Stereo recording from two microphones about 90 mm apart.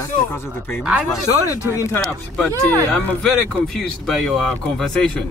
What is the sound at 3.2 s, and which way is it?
A woman's voice, centre (ahead or behind).